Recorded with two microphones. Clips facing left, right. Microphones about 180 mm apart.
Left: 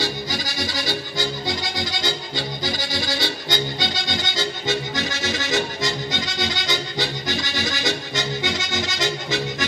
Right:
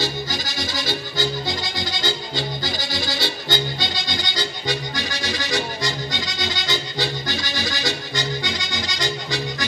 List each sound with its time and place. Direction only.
1.9 s accordion: 20° left (ahead or behind)